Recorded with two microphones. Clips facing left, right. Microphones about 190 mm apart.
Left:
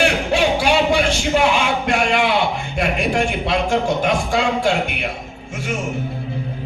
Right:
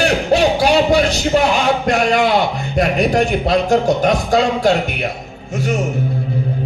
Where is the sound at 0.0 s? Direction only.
40° right (ahead or behind).